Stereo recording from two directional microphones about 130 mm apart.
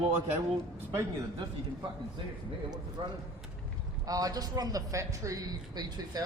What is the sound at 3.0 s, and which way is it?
Speech, 40° right (ahead or behind).